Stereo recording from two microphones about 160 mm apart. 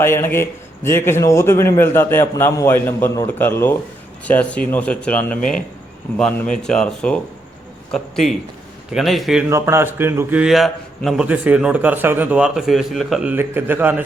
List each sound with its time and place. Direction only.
0.0 s a man's voice: 15° left (ahead or behind); by 9.5 s centre (ahead or behind)
9.5 s a man's voice: 20° right (ahead or behind)